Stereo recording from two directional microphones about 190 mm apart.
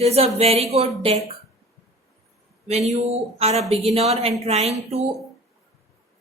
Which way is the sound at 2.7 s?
35° right (ahead or behind).